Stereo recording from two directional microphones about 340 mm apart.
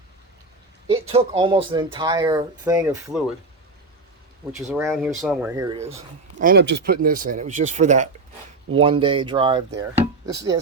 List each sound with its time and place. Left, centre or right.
0.9 s speech: centre
4.5 s speech: centre
6.4 s speech: right; by 10.6 s centre